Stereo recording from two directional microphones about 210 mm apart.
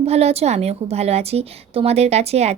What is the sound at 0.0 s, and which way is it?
A woman's voice, 30° right (ahead or behind).